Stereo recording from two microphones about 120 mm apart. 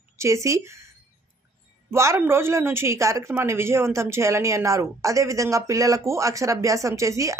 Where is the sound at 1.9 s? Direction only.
25° right (ahead or behind).